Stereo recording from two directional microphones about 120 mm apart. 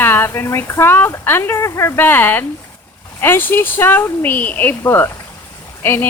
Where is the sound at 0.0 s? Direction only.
15° left (ahead or behind).